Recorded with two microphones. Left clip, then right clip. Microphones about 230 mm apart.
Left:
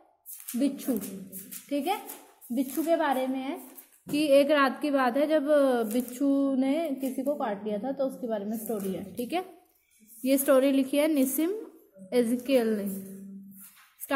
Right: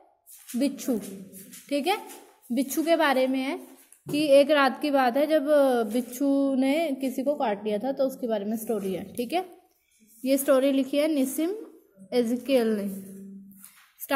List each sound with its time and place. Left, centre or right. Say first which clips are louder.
0.6 s a woman's voice: right 2 dB; centre
4.1 s a woman's voice: right 3 dB; centre